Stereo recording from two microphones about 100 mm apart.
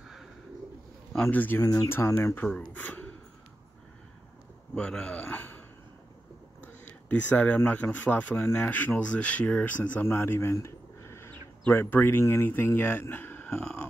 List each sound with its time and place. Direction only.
1.2 s speech: 20° left (ahead or behind)
1.6 s speech: 35° left (ahead or behind)
1.9 s speech: 25° left (ahead or behind)
4.7 s a man's voice: 10° left (ahead or behind)
6.6 s speech: 15° left (ahead or behind)
13.5 s a man's voice: 10° left (ahead or behind)